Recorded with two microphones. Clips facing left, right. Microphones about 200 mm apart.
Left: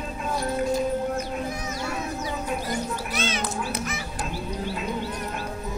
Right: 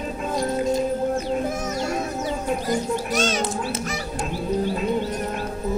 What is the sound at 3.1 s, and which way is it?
Speech, 45° right (ahead or behind).